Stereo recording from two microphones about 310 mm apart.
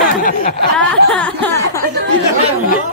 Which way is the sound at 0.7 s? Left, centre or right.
Centre.